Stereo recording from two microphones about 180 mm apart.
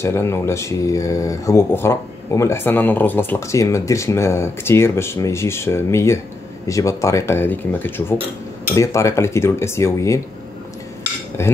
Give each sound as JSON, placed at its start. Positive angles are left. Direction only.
{"t": 0.0, "sound": "speech", "side_deg": 15}
{"t": 11.4, "sound": "speech", "side_deg": 15}